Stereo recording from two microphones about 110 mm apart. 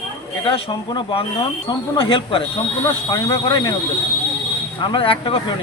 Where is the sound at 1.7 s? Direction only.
40° left (ahead or behind).